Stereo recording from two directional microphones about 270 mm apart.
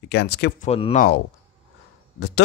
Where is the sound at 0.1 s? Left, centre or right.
Left.